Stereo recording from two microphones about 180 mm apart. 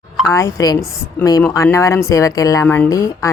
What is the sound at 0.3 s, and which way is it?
Speech, 15° left (ahead or behind).